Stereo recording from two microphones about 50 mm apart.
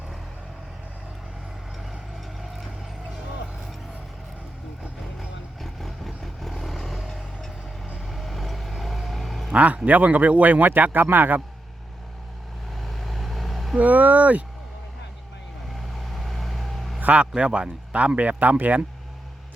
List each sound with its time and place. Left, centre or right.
1.8 s vehicle: centre
5.5 s vehicle: centre
9.5 s a man's voice: right
12.7 s vehicle: centre
13.7 s a man's voice: right
15.7 s vehicle: centre
17.0 s a man's voice: right